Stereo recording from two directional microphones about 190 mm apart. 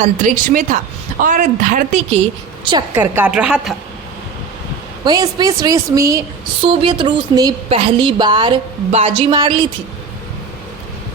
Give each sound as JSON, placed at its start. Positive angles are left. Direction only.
{"t": 0.0, "sound": "a woman's voice", "side_deg": -45}
{"t": 2.9, "sound": "a woman's voice", "side_deg": -10}
{"t": 5.0, "sound": "a woman's voice", "side_deg": -20}
{"t": 6.6, "sound": "a woman's voice", "side_deg": -25}
{"t": 8.9, "sound": "a woman's voice", "side_deg": -35}
{"t": 9.3, "sound": "a woman's voice", "side_deg": -25}